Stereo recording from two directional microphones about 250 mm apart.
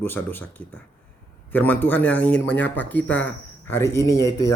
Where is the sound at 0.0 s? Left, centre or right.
Centre.